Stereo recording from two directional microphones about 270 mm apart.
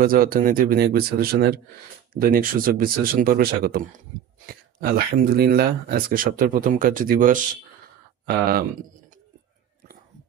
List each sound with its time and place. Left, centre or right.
0.0 s speech: right